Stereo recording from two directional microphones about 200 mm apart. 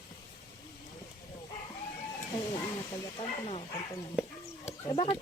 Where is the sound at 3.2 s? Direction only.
30° left (ahead or behind).